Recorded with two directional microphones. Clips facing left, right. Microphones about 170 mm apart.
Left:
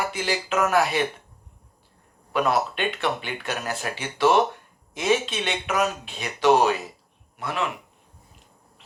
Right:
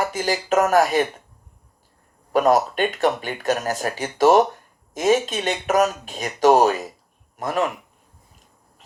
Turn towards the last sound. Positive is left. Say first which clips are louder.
# right 5 dB
turn(degrees=-45)  # may be behind; listen again after turning